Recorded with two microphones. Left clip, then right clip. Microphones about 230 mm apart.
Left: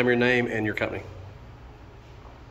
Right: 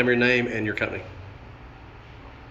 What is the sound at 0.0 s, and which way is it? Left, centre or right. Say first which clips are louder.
A man's voice: right 1 dB; centre.